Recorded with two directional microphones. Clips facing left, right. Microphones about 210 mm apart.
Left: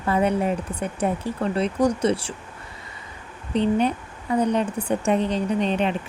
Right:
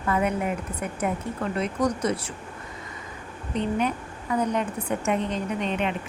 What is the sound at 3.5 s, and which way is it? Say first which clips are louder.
A woman's voice: left 5 dB; 30° left (ahead or behind).